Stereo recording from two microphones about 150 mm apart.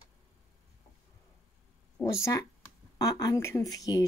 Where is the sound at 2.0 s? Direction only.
20° left (ahead or behind).